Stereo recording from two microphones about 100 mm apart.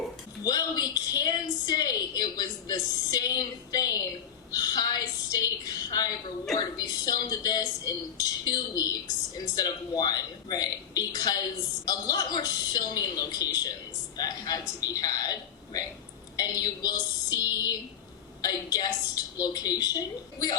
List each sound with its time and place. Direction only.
0.4 s a woman's voice: 40° left (ahead or behind)